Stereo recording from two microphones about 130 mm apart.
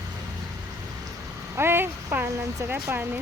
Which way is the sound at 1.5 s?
20° right (ahead or behind).